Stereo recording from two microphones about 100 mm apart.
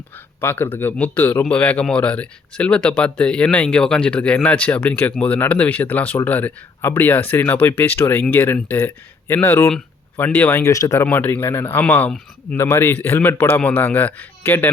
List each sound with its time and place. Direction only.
0.3 s speech: 20° left (ahead or behind)
11.0 s speech: 20° left (ahead or behind)